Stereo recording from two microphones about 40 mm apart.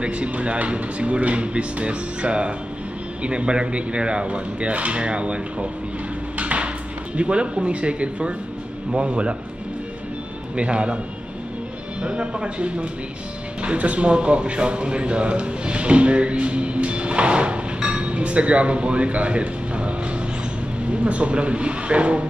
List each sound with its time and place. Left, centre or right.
0.0 s speech: right
6.3 s a sound: right
7.2 s speech: right
10.5 s speech: right
12.0 s a man's voice: right
20.9 s speech: right